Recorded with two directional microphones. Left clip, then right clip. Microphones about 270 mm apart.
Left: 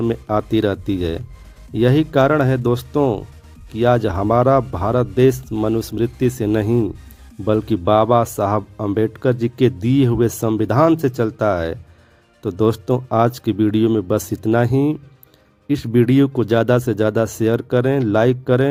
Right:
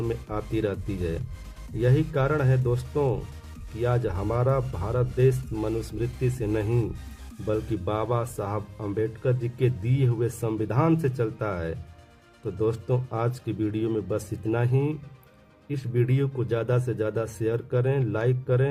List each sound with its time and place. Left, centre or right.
0.0 s speech: left